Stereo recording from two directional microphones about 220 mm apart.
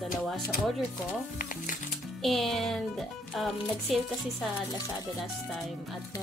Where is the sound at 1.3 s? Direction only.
35° left (ahead or behind).